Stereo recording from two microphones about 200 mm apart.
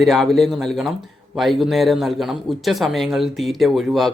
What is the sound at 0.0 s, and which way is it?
Speech, centre (ahead or behind).